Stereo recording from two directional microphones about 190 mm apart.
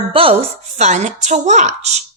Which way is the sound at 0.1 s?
30° right (ahead or behind).